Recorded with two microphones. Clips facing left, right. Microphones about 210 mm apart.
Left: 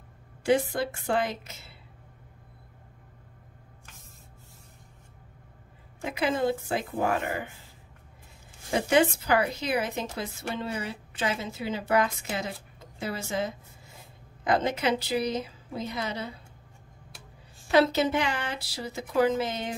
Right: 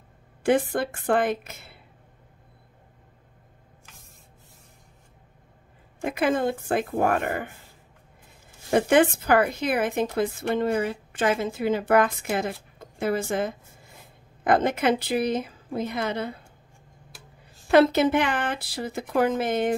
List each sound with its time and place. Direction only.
0.4 s speech: 55° right (ahead or behind)
6.0 s speech: 55° right (ahead or behind)
8.6 s a woman's voice: 55° right (ahead or behind)
17.6 s speech: 55° right (ahead or behind)